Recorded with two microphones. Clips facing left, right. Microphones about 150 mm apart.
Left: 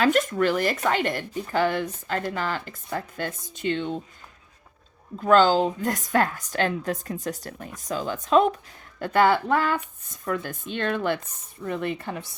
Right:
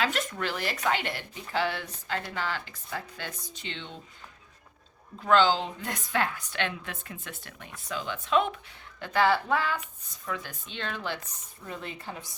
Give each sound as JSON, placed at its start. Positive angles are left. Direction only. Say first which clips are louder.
{"t": 0.0, "sound": "speech", "louder": "left 9 dB", "side_deg": 50}
{"t": 5.2, "sound": "a woman's voice", "louder": "left 5 dB", "side_deg": 45}